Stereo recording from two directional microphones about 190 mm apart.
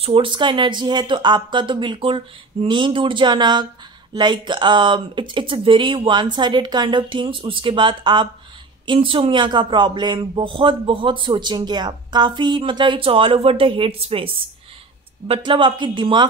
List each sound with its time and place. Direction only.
0.0 s a man's voice: 25° right (ahead or behind)